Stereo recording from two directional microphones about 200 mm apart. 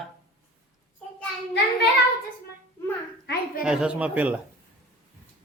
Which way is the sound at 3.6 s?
5° right (ahead or behind).